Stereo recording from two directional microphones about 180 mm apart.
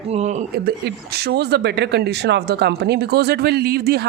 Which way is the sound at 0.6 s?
65° right (ahead or behind).